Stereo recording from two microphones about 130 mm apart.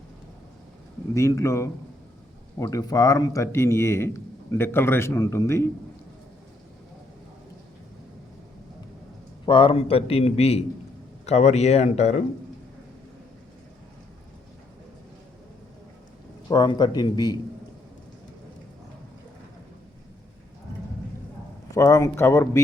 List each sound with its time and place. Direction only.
1.1 s a man's voice: 20° left (ahead or behind)
9.5 s a man's voice: 40° left (ahead or behind); by 12.2 s 55° left (ahead or behind)
16.5 s speech: 35° left (ahead or behind)
21.8 s a man's voice: 25° left (ahead or behind)